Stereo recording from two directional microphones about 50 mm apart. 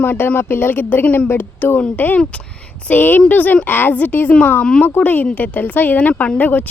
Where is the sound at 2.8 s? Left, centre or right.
Left.